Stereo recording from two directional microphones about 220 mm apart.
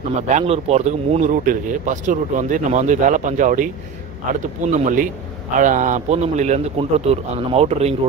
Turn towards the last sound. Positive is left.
turn(degrees=-30)  # may be behind; listen again after turning